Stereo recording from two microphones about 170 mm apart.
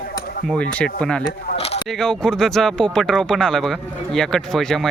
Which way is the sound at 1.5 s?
65° left (ahead or behind).